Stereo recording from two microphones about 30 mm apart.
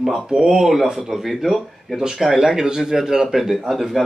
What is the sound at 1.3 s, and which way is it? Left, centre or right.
Speech, centre.